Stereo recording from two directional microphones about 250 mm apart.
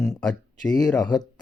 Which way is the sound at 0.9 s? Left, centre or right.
Centre.